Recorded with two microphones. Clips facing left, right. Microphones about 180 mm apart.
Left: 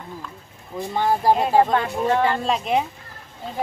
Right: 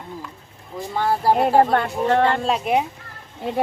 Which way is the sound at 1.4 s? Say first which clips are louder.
Right 2 dB; 60° right (ahead or behind).